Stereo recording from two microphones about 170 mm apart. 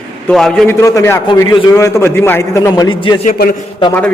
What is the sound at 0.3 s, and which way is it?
Speech, 5° left (ahead or behind).